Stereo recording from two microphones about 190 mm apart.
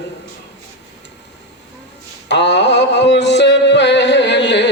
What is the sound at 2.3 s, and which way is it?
Music, 65° left (ahead or behind).